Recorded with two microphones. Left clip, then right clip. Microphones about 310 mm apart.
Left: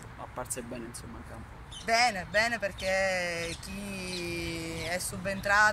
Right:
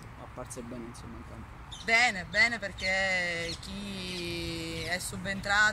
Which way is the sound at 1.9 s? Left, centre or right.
Centre.